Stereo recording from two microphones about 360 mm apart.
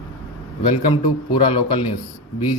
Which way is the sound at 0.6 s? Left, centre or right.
Centre.